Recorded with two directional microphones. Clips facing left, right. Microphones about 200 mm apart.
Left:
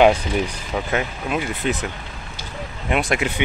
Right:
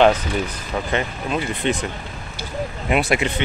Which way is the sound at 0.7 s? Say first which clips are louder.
Even; 5° left (ahead or behind).